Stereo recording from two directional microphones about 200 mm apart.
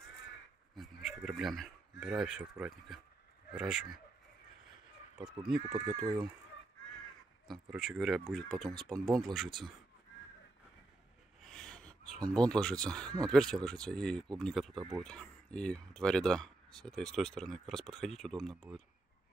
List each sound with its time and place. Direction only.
0.7 s a sound: centre (ahead or behind)
3.5 s speech: 5° right (ahead or behind)
5.9 s speech: 20° right (ahead or behind)
7.4 s speech: centre (ahead or behind)
11.4 s speech: 5° left (ahead or behind)
14.8 s speech: 20° right (ahead or behind)
15.0 s speech: 5° left (ahead or behind)